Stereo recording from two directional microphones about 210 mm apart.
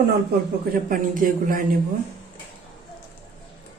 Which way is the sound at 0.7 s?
40° right (ahead or behind).